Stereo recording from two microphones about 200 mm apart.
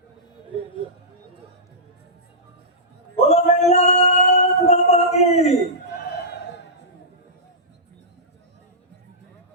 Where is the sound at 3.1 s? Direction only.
30° left (ahead or behind).